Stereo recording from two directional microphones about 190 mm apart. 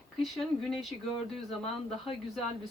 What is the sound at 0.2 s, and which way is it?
Speech, centre (ahead or behind).